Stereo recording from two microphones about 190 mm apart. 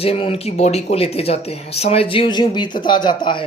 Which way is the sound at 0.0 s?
30° left (ahead or behind).